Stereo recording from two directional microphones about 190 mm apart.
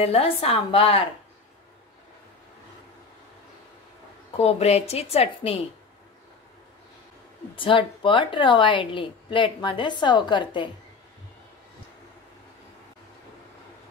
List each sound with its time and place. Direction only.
0.0 s a woman's voice: 30° left (ahead or behind)
4.4 s a woman's voice: 35° left (ahead or behind)
7.5 s a woman's voice: 25° left (ahead or behind)